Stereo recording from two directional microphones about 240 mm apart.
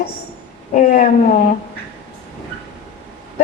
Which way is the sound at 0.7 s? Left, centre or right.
Left.